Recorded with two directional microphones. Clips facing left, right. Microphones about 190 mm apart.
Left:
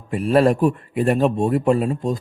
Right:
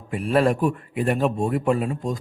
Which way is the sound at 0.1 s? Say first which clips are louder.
Left 4 dB; 40° left (ahead or behind).